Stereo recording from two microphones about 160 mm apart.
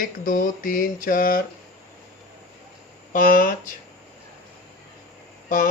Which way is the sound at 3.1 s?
60° left (ahead or behind).